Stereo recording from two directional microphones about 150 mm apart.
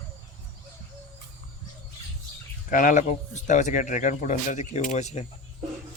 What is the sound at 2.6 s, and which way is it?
Speech, 65° left (ahead or behind).